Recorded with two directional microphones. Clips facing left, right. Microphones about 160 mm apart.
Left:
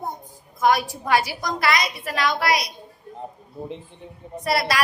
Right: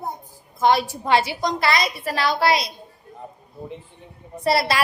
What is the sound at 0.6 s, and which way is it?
A woman's voice, 25° right (ahead or behind).